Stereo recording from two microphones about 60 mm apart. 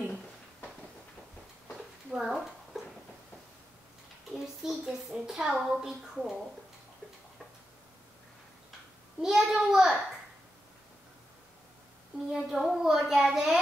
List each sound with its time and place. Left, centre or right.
2.0 s a sound: centre
4.3 s a woman's voice: centre
9.2 s a woman's voice: centre
12.3 s a woman's voice: centre